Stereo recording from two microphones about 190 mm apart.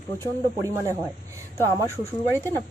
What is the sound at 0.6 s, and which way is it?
Speech, 15° right (ahead or behind).